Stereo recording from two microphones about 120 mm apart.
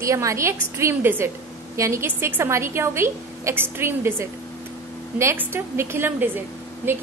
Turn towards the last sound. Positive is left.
turn(degrees=-15)  # may be behind; listen again after turning